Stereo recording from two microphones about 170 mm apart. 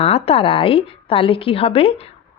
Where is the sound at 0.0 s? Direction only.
35° left (ahead or behind).